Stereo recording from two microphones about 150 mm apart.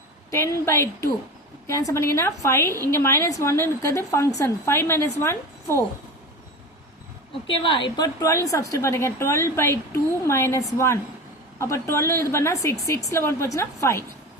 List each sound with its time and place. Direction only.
0.3 s a woman's voice: 20° left (ahead or behind)
7.4 s a woman's voice: 35° left (ahead or behind); by 14.0 s 20° left (ahead or behind)